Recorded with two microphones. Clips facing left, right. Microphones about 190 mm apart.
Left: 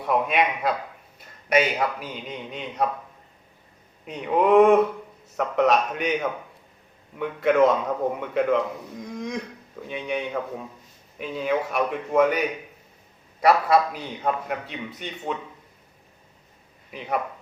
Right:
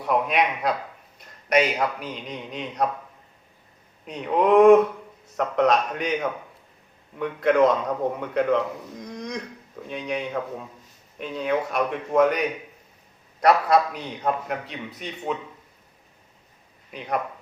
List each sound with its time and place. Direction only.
0.0 s a man's voice: centre (ahead or behind)
4.0 s a man's voice: centre (ahead or behind)